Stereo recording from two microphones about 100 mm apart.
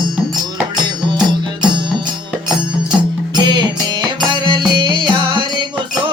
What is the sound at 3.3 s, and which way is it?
Music, 50° right (ahead or behind).